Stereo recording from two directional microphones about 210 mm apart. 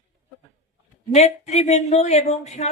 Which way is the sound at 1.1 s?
30° left (ahead or behind).